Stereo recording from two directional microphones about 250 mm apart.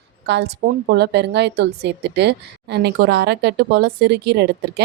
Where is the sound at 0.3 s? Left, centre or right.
Right.